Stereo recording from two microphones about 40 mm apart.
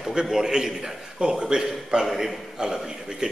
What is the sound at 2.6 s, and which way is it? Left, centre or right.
Speech, centre.